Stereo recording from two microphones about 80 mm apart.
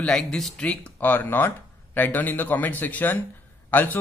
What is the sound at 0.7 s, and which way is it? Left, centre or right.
Speech, centre.